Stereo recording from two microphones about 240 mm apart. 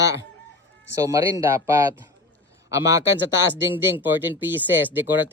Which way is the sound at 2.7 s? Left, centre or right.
Centre.